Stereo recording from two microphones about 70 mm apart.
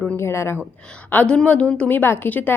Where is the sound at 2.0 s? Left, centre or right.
Left.